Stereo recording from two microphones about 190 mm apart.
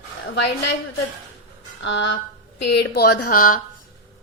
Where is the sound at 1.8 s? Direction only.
70° left (ahead or behind).